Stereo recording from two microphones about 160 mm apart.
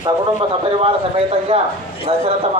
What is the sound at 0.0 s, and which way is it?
A man's voice, 35° right (ahead or behind).